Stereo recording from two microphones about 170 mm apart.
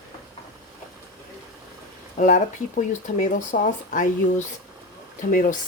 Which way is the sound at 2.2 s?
50° left (ahead or behind).